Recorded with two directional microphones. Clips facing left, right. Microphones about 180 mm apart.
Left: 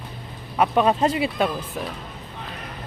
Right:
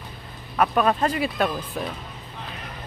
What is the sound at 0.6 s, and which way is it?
Speech, 20° left (ahead or behind).